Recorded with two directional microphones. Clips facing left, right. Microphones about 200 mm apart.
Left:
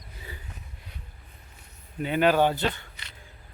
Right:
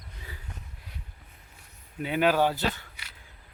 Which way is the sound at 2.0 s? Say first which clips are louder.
Left 2 dB; 5° right (ahead or behind).